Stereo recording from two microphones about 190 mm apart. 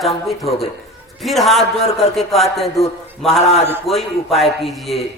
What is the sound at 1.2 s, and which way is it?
A man's voice, centre (ahead or behind).